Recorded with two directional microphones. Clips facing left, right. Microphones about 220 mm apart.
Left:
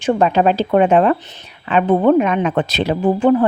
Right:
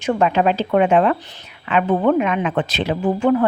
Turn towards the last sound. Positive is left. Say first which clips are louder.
# left 3 dB
turn(degrees=35)  # may be behind; listen again after turning